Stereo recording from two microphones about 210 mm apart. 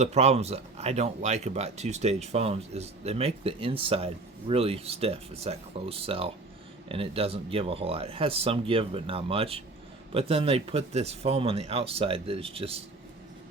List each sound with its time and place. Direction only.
0.0 s speech: 30° right (ahead or behind)